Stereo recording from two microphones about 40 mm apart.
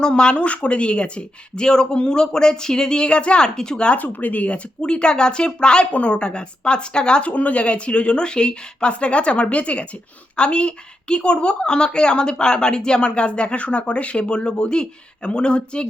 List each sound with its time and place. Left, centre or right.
0.0 s a woman's voice: left
3.4 s speech: centre
3.8 s a woman's voice: left